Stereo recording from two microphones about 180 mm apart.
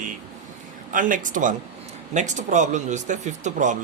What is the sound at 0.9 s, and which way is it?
Speech, 45° right (ahead or behind).